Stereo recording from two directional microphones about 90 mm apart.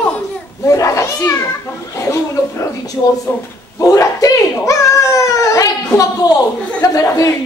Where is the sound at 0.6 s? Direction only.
35° left (ahead or behind).